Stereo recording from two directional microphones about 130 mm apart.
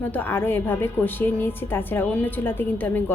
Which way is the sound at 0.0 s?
15° left (ahead or behind).